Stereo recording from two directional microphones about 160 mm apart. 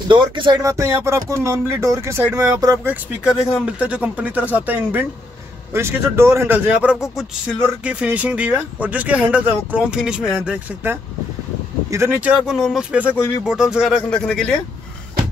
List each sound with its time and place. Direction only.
0.1 s speech: 30° right (ahead or behind)
3.5 s speech: 10° right (ahead or behind)